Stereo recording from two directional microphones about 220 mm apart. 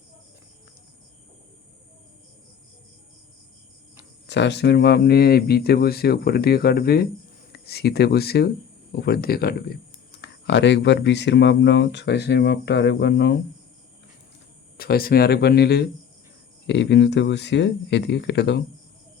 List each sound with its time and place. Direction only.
4.3 s speech: 50° left (ahead or behind)
14.8 s speech: 45° left (ahead or behind)